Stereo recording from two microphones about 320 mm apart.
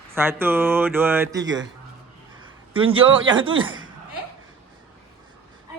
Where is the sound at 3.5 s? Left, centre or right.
Right.